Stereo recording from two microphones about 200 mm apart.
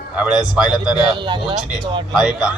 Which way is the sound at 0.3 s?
5° right (ahead or behind).